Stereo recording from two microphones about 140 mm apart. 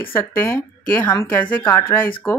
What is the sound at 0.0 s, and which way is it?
Speech, 15° left (ahead or behind).